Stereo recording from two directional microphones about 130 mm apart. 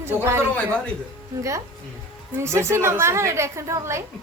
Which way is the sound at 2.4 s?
20° right (ahead or behind).